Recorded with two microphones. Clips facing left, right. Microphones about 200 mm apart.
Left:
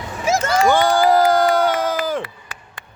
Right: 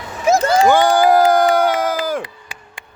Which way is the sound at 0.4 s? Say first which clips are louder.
Right 2 dB; 35° right (ahead or behind).